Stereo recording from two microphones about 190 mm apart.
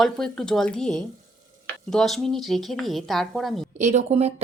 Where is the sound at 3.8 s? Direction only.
35° right (ahead or behind).